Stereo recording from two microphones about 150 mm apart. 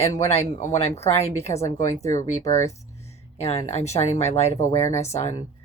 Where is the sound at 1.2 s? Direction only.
45° left (ahead or behind).